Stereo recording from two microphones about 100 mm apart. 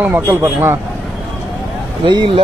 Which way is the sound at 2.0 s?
55° right (ahead or behind).